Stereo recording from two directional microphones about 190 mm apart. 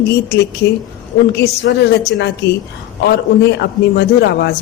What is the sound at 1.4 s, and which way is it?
A man's voice, 65° left (ahead or behind).